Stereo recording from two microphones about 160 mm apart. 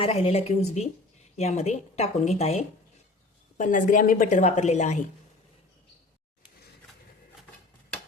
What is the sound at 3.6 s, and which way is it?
Speech, 55° left (ahead or behind).